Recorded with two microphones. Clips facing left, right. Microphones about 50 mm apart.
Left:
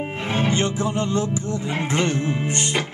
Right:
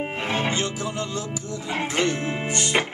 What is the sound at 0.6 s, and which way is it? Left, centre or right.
Music, left.